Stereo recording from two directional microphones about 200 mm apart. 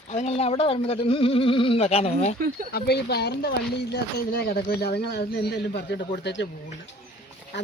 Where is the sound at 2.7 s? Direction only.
50° left (ahead or behind).